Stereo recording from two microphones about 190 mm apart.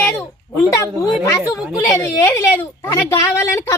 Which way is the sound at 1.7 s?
15° left (ahead or behind).